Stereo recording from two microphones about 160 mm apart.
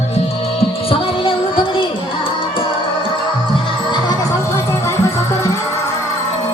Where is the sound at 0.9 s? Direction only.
35° left (ahead or behind).